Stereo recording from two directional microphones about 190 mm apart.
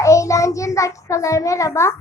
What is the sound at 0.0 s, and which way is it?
A child's voice, 15° left (ahead or behind).